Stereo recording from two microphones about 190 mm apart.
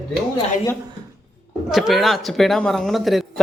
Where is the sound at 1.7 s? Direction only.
Centre (ahead or behind).